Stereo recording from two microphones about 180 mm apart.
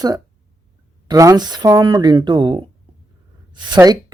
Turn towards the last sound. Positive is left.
turn(degrees=-25)  # may be behind; listen again after turning